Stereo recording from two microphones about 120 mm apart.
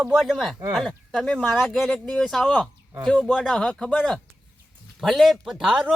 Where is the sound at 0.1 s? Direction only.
Centre (ahead or behind).